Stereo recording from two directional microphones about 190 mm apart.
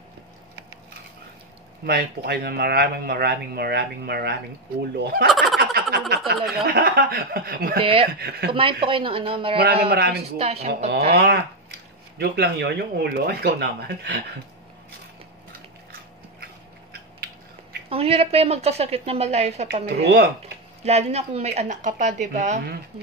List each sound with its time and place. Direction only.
1.9 s speech: 55° right (ahead or behind)
5.6 s frog: 55° right (ahead or behind)
6.5 s speech: 55° right (ahead or behind)
7.8 s speech: 30° right (ahead or behind)
8.2 s speech: 55° right (ahead or behind)
8.8 s speech: 25° right (ahead or behind)
9.8 s speech: 55° right (ahead or behind)
10.3 s a woman's voice: 35° right (ahead or behind)
11.1 s speech: 55° right (ahead or behind)
17.8 s a woman's voice: 30° right (ahead or behind)
19.7 s speech: 60° right (ahead or behind)
20.8 s a woman's voice: 35° right (ahead or behind)